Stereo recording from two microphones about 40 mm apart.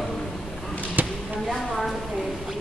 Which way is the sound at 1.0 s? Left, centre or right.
Right.